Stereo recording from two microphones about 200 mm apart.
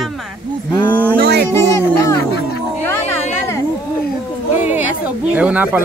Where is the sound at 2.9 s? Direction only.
15° left (ahead or behind).